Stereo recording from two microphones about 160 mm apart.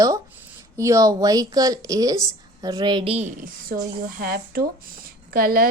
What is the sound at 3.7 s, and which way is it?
Speech, 60° right (ahead or behind).